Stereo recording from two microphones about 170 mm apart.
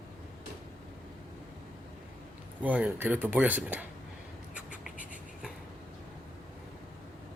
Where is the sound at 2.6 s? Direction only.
10° right (ahead or behind).